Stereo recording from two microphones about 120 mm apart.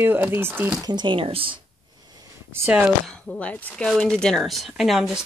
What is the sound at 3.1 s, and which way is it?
A woman's voice, 10° left (ahead or behind).